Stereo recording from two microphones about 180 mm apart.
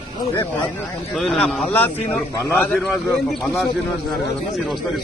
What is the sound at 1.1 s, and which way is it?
A man's voice, centre (ahead or behind).